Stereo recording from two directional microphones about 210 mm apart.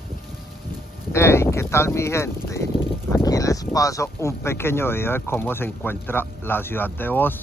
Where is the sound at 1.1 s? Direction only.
10° left (ahead or behind).